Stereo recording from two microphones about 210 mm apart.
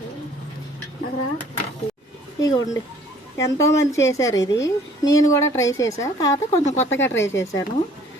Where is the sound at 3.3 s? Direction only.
15° left (ahead or behind).